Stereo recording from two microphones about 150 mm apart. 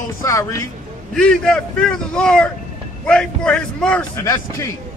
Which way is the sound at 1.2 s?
5° left (ahead or behind).